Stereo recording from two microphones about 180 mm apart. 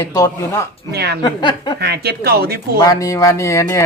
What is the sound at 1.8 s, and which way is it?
Speech, 65° right (ahead or behind).